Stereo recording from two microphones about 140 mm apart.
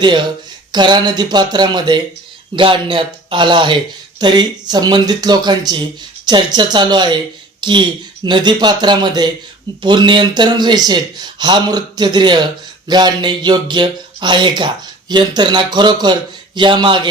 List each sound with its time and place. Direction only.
0.0 s speech: 35° right (ahead or behind)